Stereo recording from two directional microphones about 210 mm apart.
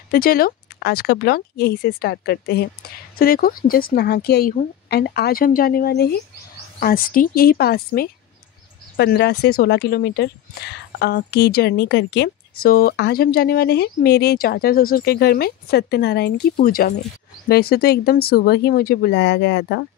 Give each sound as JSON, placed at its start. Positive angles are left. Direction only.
{"t": 0.1, "sound": "speech", "side_deg": 45}